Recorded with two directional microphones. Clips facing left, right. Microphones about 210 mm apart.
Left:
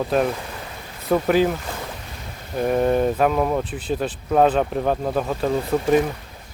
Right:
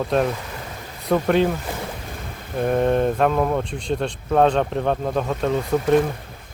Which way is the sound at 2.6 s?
Centre (ahead or behind).